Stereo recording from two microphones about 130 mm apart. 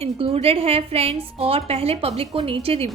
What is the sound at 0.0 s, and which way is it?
A woman's voice, 50° right (ahead or behind).